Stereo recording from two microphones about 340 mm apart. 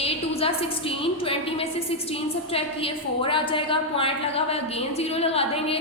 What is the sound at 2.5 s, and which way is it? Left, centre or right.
A woman's voice, centre.